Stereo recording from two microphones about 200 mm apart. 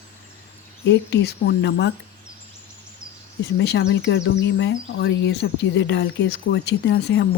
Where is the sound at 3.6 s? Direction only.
60° left (ahead or behind).